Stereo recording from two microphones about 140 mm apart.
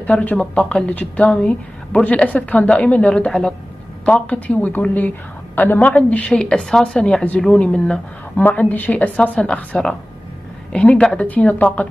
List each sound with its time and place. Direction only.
0.0 s a woman's voice: 10° left (ahead or behind)